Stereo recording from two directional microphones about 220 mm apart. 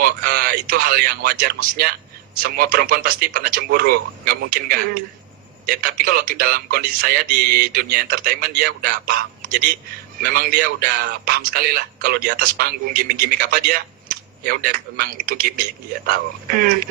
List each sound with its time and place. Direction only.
0.0 s a man's voice: 45° right (ahead or behind)